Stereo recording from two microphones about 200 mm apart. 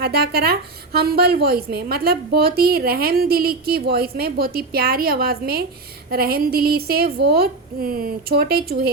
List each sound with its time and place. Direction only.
0.0 s a woman's voice: 50° right (ahead or behind)